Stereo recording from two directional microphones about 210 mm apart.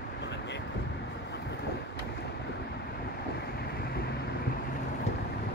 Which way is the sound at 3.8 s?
50° left (ahead or behind).